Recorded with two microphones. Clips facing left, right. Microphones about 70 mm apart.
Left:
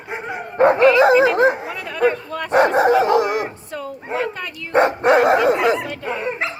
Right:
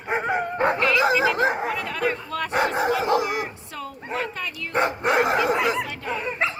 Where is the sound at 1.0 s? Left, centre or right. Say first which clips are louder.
Left 7 dB; left.